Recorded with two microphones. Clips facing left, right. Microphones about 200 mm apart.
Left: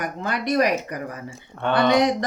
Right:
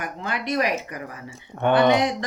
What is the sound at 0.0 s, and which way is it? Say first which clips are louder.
Speech: left 3 dB; 45° left (ahead or behind).